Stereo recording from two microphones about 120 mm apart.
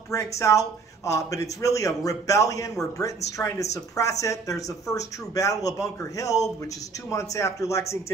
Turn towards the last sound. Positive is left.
turn(degrees=25)  # may be behind; listen again after turning